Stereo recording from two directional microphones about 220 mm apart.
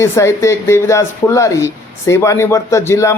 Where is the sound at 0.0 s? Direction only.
15° left (ahead or behind).